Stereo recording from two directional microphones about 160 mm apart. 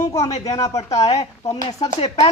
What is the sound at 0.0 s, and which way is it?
Speech, 20° left (ahead or behind).